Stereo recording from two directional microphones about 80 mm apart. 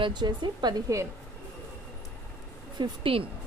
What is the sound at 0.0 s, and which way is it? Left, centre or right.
Speech, right.